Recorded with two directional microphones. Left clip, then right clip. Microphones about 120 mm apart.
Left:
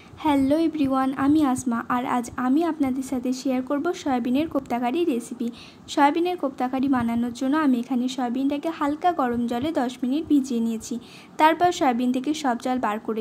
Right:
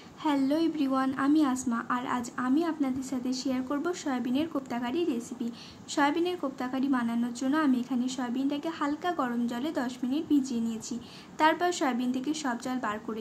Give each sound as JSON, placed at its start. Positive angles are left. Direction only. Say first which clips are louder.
{"t": 0.2, "sound": "a woman's voice", "louder": "left 6 dB", "side_deg": 65}
{"t": 5.9, "sound": "a woman's voice", "louder": "left 7 dB", "side_deg": 55}